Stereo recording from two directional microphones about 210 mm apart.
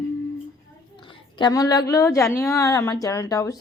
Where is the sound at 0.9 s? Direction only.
20° left (ahead or behind).